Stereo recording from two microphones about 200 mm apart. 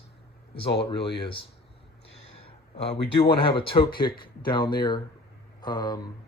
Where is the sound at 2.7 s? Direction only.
30° left (ahead or behind).